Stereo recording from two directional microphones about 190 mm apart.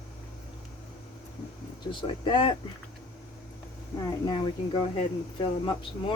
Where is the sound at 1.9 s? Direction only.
25° left (ahead or behind).